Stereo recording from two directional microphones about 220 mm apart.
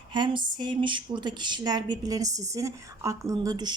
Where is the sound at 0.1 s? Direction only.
20° right (ahead or behind).